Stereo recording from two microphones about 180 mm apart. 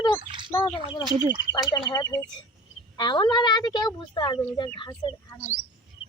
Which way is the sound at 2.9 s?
25° left (ahead or behind).